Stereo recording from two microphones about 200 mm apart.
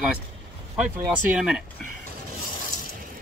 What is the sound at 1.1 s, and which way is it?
Speech, 5° right (ahead or behind).